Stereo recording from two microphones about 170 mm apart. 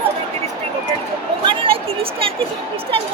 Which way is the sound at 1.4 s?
30° right (ahead or behind).